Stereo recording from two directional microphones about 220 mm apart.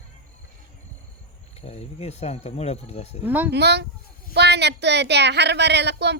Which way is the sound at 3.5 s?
50° right (ahead or behind).